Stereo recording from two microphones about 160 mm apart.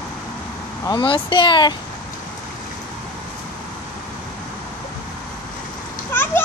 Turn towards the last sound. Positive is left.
turn(degrees=15)  # may be behind; listen again after turning